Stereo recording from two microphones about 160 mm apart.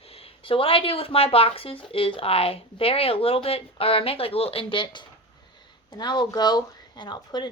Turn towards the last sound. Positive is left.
turn(degrees=25)  # may be behind; listen again after turning